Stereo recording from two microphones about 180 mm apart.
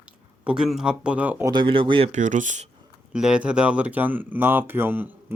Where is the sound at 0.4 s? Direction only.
5° right (ahead or behind).